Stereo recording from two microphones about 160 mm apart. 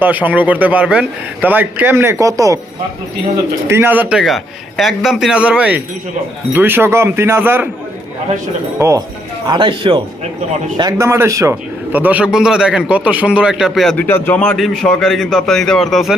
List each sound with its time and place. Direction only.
0.0 s a man's voice: 10° right (ahead or behind)
3.7 s a man's voice: 15° right (ahead or behind)
8.8 s speech: 20° right (ahead or behind)
9.5 s speech: 30° right (ahead or behind)
10.8 s a man's voice: 20° right (ahead or behind); by 13.9 s centre (ahead or behind)
13.9 s a man's voice: 10° left (ahead or behind)